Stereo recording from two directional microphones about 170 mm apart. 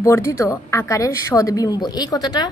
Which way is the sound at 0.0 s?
15° left (ahead or behind).